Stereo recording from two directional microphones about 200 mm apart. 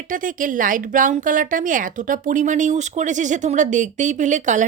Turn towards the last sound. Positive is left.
turn(degrees=-40)  # may be behind; listen again after turning